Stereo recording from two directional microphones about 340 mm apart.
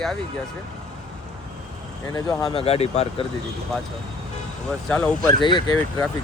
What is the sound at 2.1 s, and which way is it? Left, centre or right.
Speech, centre.